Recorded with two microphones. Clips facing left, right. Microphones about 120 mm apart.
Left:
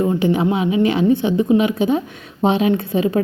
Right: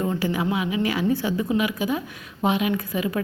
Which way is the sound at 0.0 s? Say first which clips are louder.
Left 7 dB; 20° left (ahead or behind).